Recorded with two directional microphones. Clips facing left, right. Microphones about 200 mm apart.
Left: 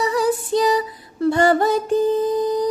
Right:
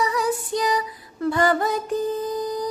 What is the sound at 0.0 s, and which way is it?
Female singing, 30° left (ahead or behind).